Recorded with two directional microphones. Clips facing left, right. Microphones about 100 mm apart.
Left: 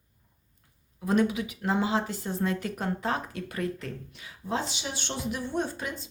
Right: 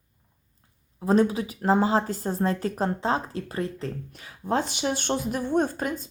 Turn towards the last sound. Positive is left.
turn(degrees=-45)  # may be behind; listen again after turning